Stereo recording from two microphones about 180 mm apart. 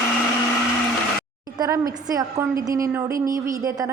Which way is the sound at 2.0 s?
20° right (ahead or behind).